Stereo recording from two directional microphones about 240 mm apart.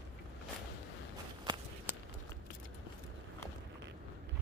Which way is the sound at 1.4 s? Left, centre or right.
Centre.